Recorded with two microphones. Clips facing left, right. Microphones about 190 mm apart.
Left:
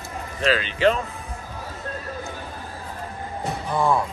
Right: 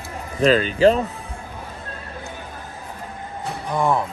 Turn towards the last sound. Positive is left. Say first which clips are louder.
# right 1 dB
turn(degrees=-15)  # may be behind; listen again after turning